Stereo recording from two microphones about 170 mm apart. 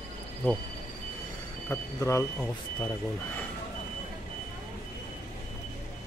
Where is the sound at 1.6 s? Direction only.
15° left (ahead or behind).